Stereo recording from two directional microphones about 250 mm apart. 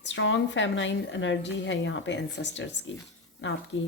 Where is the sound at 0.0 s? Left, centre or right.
Left.